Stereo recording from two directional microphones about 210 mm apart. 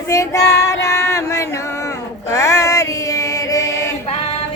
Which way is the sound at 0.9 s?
15° left (ahead or behind).